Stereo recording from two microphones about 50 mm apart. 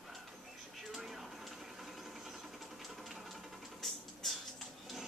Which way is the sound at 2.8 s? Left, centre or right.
Centre.